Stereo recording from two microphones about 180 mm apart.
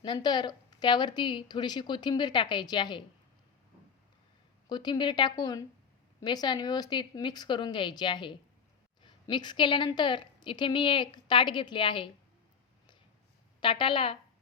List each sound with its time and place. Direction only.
0.0 s a woman's voice: 25° left (ahead or behind)
4.7 s a woman's voice: 25° left (ahead or behind)
13.6 s a woman's voice: 25° left (ahead or behind)